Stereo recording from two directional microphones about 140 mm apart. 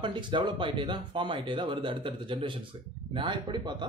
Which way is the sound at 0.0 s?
35° right (ahead or behind).